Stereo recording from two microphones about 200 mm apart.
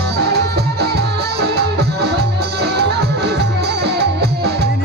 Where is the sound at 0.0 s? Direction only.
55° right (ahead or behind).